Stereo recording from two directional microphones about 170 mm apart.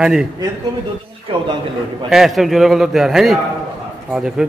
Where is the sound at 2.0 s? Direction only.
Centre (ahead or behind).